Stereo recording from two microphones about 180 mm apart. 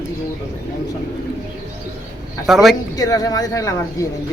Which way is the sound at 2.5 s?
Centre (ahead or behind).